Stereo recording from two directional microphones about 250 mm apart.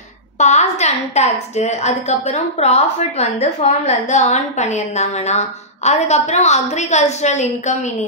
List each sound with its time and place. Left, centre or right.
0.4 s a woman's voice: left